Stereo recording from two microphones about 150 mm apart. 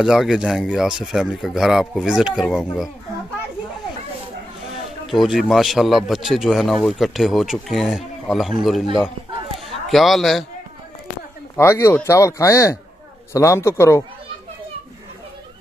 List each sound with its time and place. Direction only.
0.0 s speech: 5° right (ahead or behind)
5.0 s speech: centre (ahead or behind)
9.8 s speech: centre (ahead or behind)
11.5 s speech: 15° left (ahead or behind)